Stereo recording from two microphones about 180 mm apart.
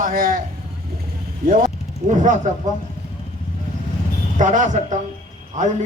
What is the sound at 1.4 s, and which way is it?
Speech, 55° right (ahead or behind).